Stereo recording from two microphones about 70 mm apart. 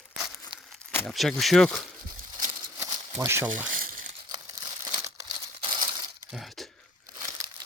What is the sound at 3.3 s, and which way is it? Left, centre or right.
Speech, right.